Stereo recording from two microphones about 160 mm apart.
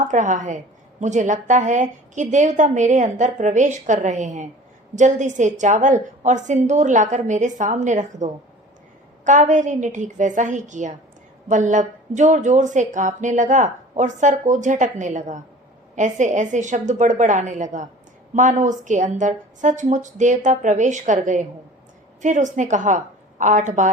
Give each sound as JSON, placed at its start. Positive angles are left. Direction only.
{"t": 0.0, "sound": "a woman's voice", "side_deg": -50}